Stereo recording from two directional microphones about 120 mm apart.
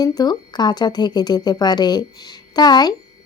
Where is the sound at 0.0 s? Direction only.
30° left (ahead or behind).